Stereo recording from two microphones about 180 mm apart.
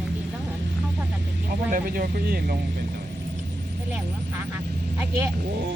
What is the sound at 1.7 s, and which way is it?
Speech, 55° right (ahead or behind).